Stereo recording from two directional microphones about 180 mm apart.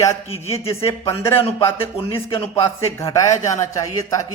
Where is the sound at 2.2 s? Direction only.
15° left (ahead or behind).